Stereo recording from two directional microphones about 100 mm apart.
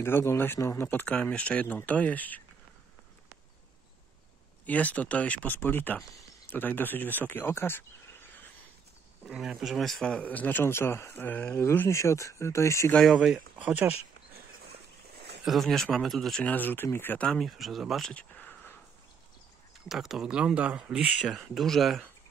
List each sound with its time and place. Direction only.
0.0 s speech: 25° left (ahead or behind)
4.6 s speech: 15° left (ahead or behind)
9.3 s speech: 5° right (ahead or behind); by 12.9 s 30° left (ahead or behind)
13.0 s speech: 5° right (ahead or behind)
15.4 s speech: centre (ahead or behind)
16.4 s speech: 15° left (ahead or behind)
17.3 s speech: centre (ahead or behind)
18.1 s a sound: 15° left (ahead or behind)
19.9 s speech: 5° right (ahead or behind)
21.3 s speech: centre (ahead or behind)